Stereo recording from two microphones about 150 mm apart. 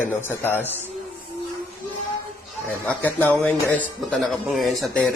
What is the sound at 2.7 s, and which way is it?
A man's voice, 10° left (ahead or behind).